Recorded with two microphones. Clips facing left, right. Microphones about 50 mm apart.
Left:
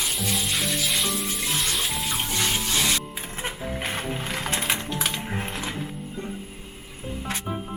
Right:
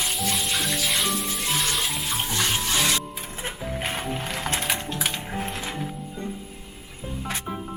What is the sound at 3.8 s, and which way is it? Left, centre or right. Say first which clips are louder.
Music: right 1 dB; centre.